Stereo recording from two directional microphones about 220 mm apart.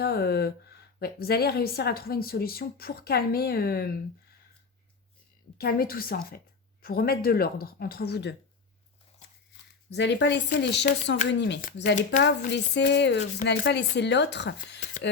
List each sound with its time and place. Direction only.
0.0 s a woman's voice: 45° left (ahead or behind)
5.5 s a woman's voice: 45° left (ahead or behind)
9.9 s a woman's voice: 50° left (ahead or behind)